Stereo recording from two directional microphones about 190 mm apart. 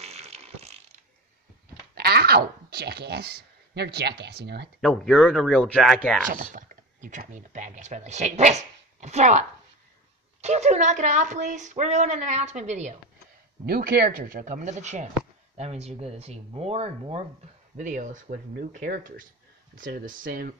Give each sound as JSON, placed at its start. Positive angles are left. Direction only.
{"t": 0.0, "sound": "fart", "side_deg": -35}
{"t": 2.0, "sound": "speech", "side_deg": -55}
{"t": 4.8, "sound": "speech", "side_deg": 5}
{"t": 6.2, "sound": "speech", "side_deg": -45}
{"t": 13.7, "sound": "speech", "side_deg": -55}